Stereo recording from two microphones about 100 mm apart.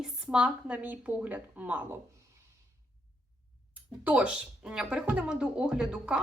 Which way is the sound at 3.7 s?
15° right (ahead or behind).